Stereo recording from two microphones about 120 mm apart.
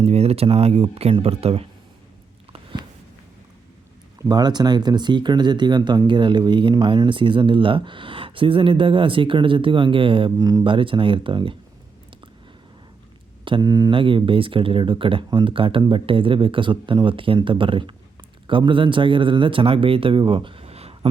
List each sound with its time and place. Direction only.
0.0 s speech: 55° right (ahead or behind)
4.2 s speech: 35° right (ahead or behind)
10.7 s speech: 45° right (ahead or behind)
13.6 s speech: 30° right (ahead or behind)
13.9 s speech: 45° right (ahead or behind)